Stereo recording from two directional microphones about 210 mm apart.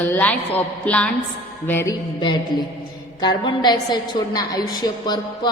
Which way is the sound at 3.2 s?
20° left (ahead or behind).